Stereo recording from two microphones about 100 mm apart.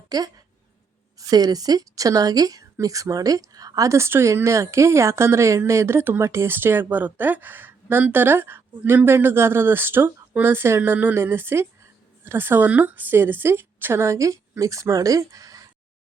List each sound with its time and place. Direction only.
0.1 s a woman's voice: 40° right (ahead or behind)